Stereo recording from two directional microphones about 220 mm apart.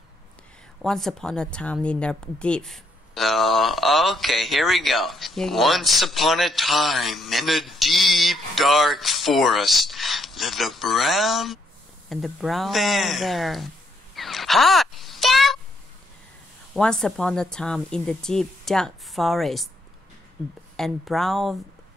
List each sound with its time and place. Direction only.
0.8 s speech: centre (ahead or behind)
14.1 s a sound: centre (ahead or behind)
16.7 s speech: 5° left (ahead or behind)
20.7 s speech: centre (ahead or behind)